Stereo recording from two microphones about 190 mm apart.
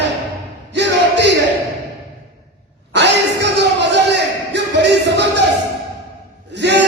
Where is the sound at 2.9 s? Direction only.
65° right (ahead or behind).